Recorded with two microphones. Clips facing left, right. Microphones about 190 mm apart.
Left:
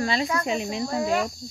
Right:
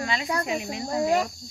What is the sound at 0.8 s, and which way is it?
Cricket, 20° right (ahead or behind).